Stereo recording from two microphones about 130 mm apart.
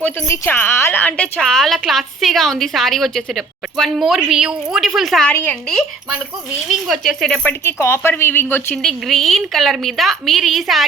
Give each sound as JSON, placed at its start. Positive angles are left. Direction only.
{"t": 0.0, "sound": "a woman's voice", "side_deg": 15}
{"t": 5.3, "sound": "a woman's voice", "side_deg": 15}
{"t": 6.7, "sound": "a woman's voice", "side_deg": 0}
{"t": 7.6, "sound": "a woman's voice", "side_deg": 20}
{"t": 8.8, "sound": "a woman's voice", "side_deg": 0}